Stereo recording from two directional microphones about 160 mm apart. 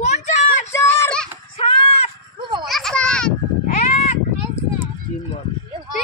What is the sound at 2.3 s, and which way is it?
Children playing, 25° right (ahead or behind).